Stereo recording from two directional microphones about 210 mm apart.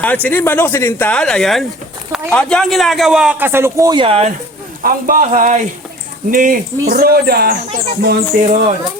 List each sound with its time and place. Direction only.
0.0 s a man's voice: 10° left (ahead or behind); by 4.3 s 25° right (ahead or behind)
4.8 s speech: 40° right (ahead or behind)